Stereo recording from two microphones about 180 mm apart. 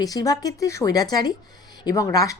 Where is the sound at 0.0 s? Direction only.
20° left (ahead or behind).